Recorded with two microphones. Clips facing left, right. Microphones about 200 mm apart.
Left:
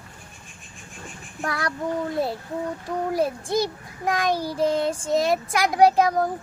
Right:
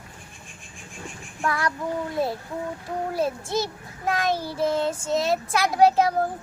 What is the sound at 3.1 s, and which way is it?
A child's voice, 15° left (ahead or behind).